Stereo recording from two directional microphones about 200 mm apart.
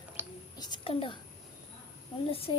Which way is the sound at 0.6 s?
20° left (ahead or behind).